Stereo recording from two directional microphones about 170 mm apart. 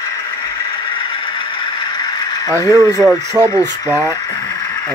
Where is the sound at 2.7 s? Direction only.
15° right (ahead or behind).